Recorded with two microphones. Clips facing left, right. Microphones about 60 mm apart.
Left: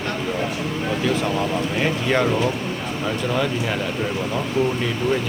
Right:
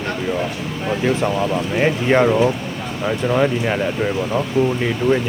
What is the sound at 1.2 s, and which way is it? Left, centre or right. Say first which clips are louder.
Speech: right 3 dB; centre.